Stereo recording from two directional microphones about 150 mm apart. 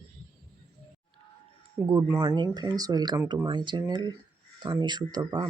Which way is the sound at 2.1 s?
20° right (ahead or behind).